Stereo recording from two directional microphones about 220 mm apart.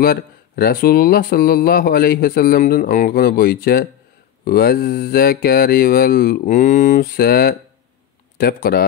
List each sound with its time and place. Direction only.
0.0 s speech: 45° left (ahead or behind)